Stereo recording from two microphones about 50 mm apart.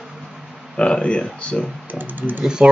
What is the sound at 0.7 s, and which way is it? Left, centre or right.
Speech, left.